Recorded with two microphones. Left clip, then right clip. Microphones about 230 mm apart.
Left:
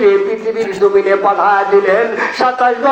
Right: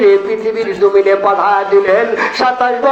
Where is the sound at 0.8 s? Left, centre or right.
Right.